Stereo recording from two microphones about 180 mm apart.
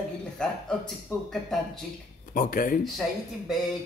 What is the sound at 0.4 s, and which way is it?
A man's voice, 5° left (ahead or behind).